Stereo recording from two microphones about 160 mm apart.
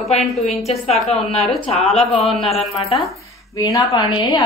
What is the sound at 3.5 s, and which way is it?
Speech, 20° left (ahead or behind).